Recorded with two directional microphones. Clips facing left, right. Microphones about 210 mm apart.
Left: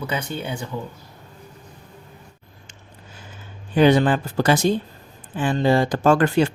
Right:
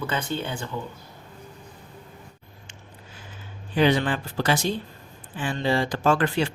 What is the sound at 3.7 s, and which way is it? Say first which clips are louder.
Speech: left 6 dB; 45° left (ahead or behind).